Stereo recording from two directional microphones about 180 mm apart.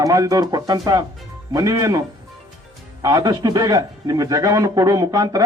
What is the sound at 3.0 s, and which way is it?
Speech, 20° right (ahead or behind).